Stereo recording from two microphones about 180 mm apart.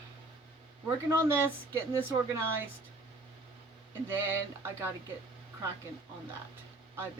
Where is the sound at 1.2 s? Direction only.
15° right (ahead or behind).